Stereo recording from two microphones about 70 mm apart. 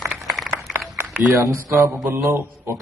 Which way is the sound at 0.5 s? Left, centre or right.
Right.